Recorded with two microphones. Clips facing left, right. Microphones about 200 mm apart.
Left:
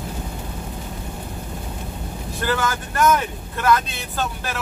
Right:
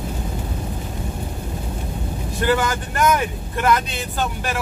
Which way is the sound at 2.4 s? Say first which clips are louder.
Right 3 dB; 15° right (ahead or behind).